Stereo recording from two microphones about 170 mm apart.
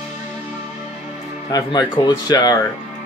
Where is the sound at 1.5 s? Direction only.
25° left (ahead or behind).